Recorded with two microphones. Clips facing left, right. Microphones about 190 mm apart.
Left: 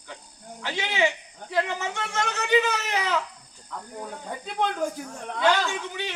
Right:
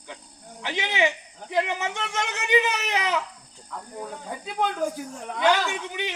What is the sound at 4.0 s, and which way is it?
Cricket, 5° right (ahead or behind).